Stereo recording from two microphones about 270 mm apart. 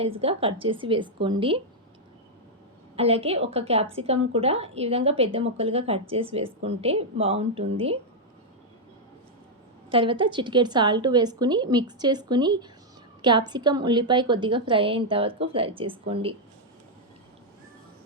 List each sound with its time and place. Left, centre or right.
0.0 s a woman's voice: right
2.9 s a woman's voice: right
9.9 s a woman's voice: centre